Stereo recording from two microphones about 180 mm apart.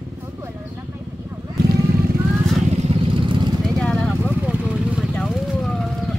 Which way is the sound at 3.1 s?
25° right (ahead or behind).